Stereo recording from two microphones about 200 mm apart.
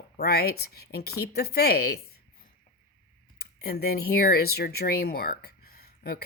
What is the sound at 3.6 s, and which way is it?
Speech, 50° left (ahead or behind).